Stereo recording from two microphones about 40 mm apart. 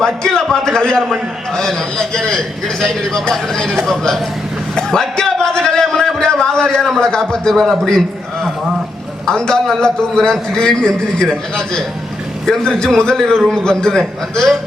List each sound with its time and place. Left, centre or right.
0.0 s a man's voice: centre
4.7 s a sound: centre
7.0 s a man's voice: centre
9.2 s a man's voice: centre
14.0 s a man's voice: centre